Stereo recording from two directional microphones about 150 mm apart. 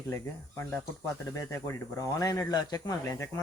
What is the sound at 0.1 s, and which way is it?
Speech, 15° left (ahead or behind).